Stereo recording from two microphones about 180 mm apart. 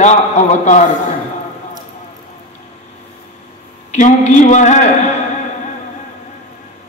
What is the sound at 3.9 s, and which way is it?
A man's voice, 40° left (ahead or behind).